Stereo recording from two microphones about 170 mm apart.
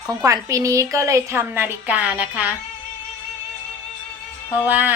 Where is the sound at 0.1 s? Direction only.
20° right (ahead or behind).